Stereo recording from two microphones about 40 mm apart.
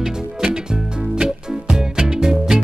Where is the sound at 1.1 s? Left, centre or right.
Right.